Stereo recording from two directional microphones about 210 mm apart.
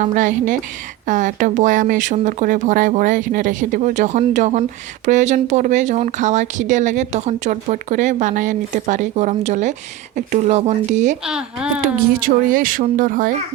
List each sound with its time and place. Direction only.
0.0 s speech: 40° right (ahead or behind)
11.3 s speech: 5° right (ahead or behind)
11.8 s speech: 40° right (ahead or behind)